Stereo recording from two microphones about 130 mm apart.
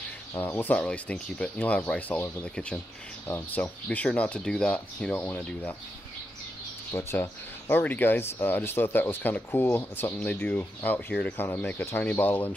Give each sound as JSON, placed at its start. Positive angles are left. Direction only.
{"t": 0.3, "sound": "speech", "side_deg": 20}
{"t": 6.9, "sound": "speech", "side_deg": 20}